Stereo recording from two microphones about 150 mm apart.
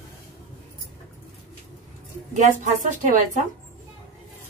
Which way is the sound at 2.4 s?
50° right (ahead or behind).